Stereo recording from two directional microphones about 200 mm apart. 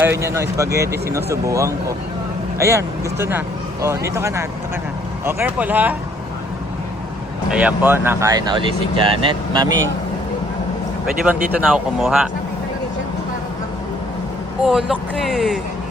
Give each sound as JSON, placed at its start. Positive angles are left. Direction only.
{"t": 0.0, "sound": "speech", "side_deg": -10}
{"t": 7.5, "sound": "speech", "side_deg": -5}
{"t": 11.3, "sound": "speech", "side_deg": -5}
{"t": 14.6, "sound": "speech", "side_deg": -5}